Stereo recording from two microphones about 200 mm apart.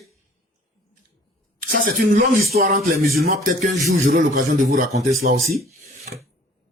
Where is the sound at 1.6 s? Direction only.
45° right (ahead or behind).